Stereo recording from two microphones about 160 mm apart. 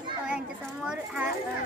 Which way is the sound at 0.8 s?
5° right (ahead or behind).